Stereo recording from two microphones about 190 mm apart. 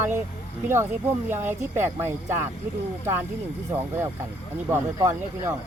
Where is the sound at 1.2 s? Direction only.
10° right (ahead or behind).